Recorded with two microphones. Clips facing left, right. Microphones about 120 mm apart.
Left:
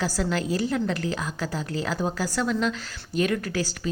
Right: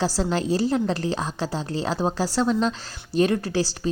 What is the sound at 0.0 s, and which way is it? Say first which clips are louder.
A woman's voice: right 3 dB; 30° right (ahead or behind).